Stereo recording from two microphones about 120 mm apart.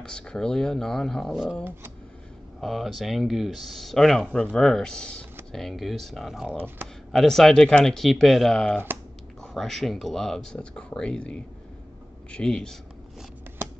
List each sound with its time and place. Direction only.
0.0 s speech: 5° left (ahead or behind)
2.6 s speech: centre (ahead or behind)